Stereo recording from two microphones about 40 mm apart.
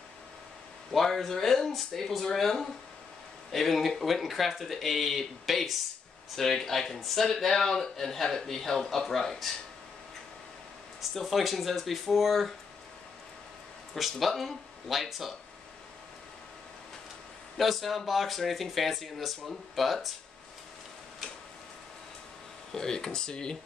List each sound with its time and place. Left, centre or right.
0.9 s a man's voice: centre
11.0 s speech: centre
14.2 s speech: centre
17.6 s speech: centre
22.7 s a man's voice: centre